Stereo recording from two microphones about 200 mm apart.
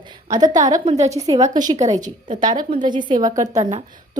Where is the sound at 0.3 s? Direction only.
20° right (ahead or behind).